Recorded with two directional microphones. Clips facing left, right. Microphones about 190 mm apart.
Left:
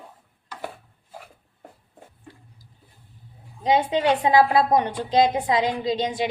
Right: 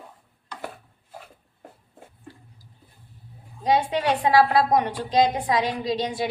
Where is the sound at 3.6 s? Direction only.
20° left (ahead or behind).